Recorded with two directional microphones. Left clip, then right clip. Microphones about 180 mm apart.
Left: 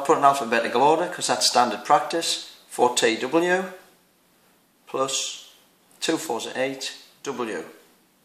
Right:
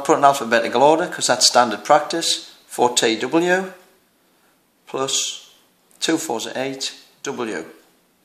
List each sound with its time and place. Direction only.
0.0 s speech: 35° right (ahead or behind)
4.8 s speech: 35° right (ahead or behind)